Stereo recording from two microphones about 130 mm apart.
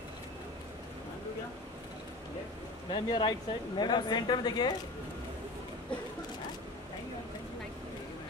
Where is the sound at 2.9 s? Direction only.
40° left (ahead or behind).